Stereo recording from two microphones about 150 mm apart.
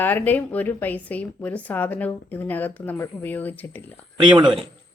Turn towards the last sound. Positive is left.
turn(degrees=-35)  # may be behind; listen again after turning